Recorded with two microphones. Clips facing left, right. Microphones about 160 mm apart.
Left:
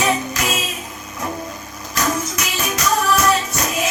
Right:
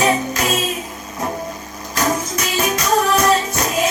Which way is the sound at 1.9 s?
30° right (ahead or behind).